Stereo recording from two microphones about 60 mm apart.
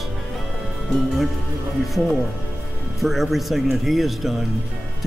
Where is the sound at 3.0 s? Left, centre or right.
Centre.